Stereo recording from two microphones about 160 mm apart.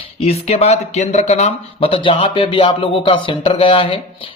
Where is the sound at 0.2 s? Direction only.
40° left (ahead or behind).